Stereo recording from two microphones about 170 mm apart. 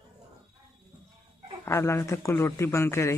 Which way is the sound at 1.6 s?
15° left (ahead or behind).